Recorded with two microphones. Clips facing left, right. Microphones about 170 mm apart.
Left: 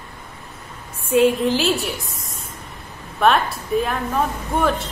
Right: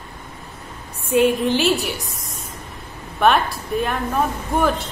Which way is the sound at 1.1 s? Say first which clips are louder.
Left 1 dB; centre (ahead or behind).